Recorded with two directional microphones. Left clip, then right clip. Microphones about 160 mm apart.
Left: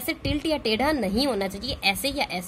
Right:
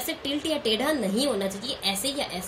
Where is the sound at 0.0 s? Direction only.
10° left (ahead or behind).